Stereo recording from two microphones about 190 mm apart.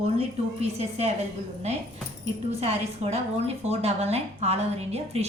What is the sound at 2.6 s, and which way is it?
A woman's voice, 35° right (ahead or behind).